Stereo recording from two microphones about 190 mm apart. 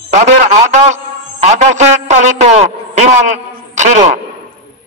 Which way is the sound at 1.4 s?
40° right (ahead or behind).